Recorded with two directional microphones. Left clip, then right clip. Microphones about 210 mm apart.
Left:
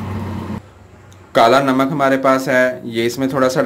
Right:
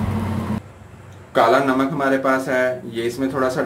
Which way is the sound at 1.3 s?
40° left (ahead or behind).